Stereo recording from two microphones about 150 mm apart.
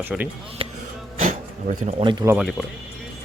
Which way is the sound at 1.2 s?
55° right (ahead or behind).